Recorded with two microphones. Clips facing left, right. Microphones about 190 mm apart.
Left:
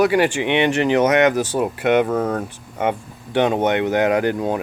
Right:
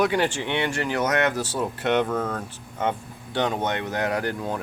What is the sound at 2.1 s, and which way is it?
Speech, 30° left (ahead or behind).